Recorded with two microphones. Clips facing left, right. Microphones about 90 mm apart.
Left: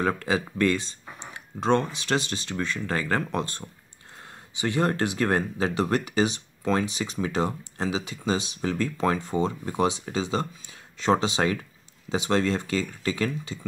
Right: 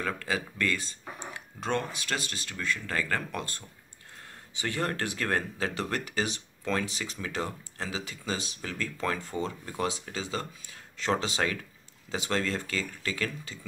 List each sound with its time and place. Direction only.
0.0 s speech: 30° left (ahead or behind)
8.5 s speech: 30° left (ahead or behind)